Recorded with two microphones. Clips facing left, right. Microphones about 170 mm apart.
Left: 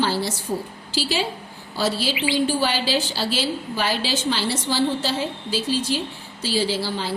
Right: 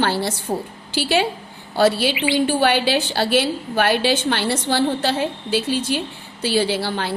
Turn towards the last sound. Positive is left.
turn(degrees=-60)  # may be behind; listen again after turning